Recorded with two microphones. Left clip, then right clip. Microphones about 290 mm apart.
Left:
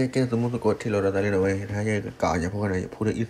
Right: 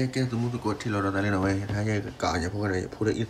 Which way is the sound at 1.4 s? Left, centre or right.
Right.